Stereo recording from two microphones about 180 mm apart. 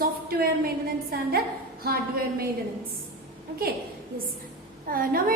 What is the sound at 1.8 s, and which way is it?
Speech, 55° right (ahead or behind).